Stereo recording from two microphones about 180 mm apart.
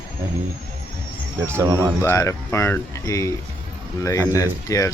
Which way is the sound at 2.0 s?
15° left (ahead or behind).